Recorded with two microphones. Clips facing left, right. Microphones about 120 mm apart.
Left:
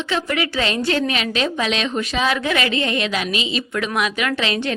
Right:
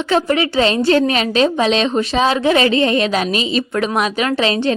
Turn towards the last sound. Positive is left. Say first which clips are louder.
# right 5 dB
turn(degrees=-35)  # may be behind; listen again after turning